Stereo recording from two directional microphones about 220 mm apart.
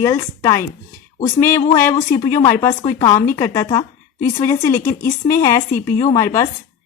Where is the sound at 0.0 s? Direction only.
15° left (ahead or behind).